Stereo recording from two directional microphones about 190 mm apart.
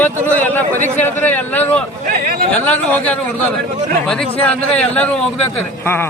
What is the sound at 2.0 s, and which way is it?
Speech, 50° right (ahead or behind).